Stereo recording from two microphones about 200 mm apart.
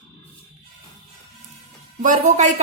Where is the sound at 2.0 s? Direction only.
40° right (ahead or behind).